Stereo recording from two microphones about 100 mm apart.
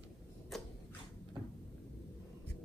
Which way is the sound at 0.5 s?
Centre (ahead or behind).